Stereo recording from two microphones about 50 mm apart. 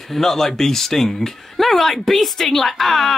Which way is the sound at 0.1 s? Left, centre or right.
Centre.